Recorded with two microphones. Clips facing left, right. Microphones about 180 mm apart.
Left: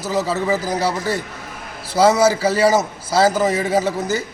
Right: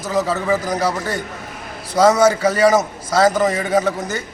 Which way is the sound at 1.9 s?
5° left (ahead or behind).